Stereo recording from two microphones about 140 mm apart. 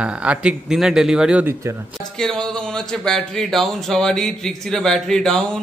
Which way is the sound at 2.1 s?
5° left (ahead or behind).